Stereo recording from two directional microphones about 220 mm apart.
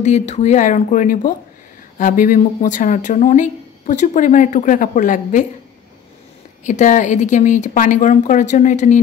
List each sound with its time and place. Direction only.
0.0 s speech: 30° left (ahead or behind)
6.6 s speech: 35° left (ahead or behind)